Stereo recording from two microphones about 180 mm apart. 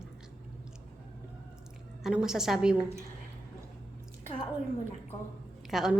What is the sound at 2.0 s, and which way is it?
Speech, 5° right (ahead or behind).